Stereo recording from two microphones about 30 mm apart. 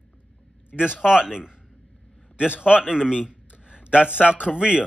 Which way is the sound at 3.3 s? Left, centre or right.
Right.